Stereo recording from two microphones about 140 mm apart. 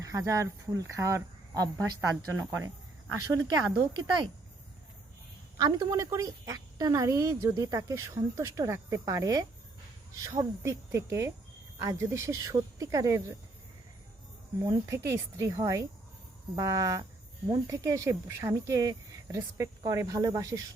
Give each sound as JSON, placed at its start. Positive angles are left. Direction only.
{"t": 0.0, "sound": "speech", "side_deg": -25}
{"t": 3.9, "sound": "speech", "side_deg": -35}
{"t": 5.5, "sound": "speech", "side_deg": -25}
{"t": 14.6, "sound": "speech", "side_deg": -25}